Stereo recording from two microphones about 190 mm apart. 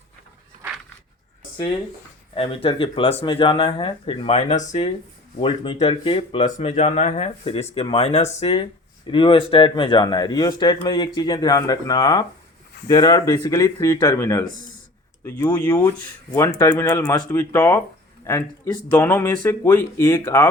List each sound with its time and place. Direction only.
2.3 s speech: 30° left (ahead or behind)
5.4 s speech: 25° left (ahead or behind)